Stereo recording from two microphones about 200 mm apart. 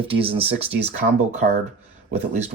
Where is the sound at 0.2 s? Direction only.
30° right (ahead or behind).